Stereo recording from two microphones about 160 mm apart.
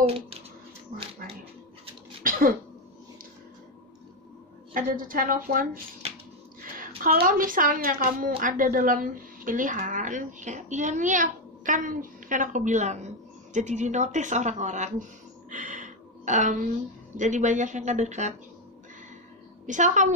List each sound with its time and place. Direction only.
0.0 s speech: 35° right (ahead or behind)
2.2 s cough: 65° right (ahead or behind)
4.7 s speech: 60° right (ahead or behind)
7.0 s a woman's voice: 65° right (ahead or behind); by 15.0 s 50° right (ahead or behind)
15.5 s a sound: 50° right (ahead or behind)
17.2 s a woman's voice: 50° right (ahead or behind)
19.6 s a woman's voice: 50° right (ahead or behind)